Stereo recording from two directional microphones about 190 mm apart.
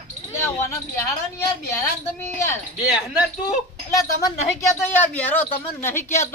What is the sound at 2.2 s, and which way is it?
Speech, 15° left (ahead or behind).